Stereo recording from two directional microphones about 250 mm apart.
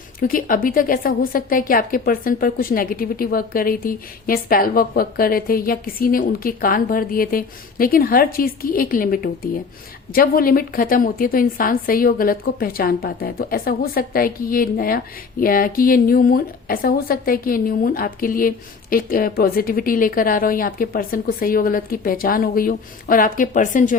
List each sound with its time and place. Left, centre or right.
0.2 s a woman's voice: left